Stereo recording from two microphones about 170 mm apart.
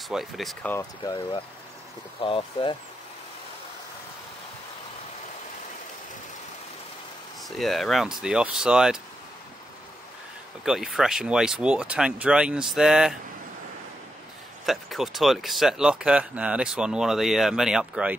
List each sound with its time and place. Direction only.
0.1 s speech: centre (ahead or behind)
0.7 s speech: 15° left (ahead or behind)
2.2 s speech: 30° left (ahead or behind)
7.4 s speech: centre (ahead or behind)
10.6 s speech: centre (ahead or behind)
14.7 s speech: centre (ahead or behind)